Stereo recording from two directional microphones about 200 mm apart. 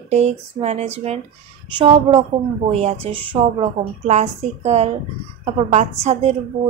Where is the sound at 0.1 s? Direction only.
35° right (ahead or behind).